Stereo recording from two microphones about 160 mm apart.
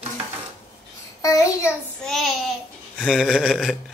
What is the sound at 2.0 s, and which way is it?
Speech, centre (ahead or behind).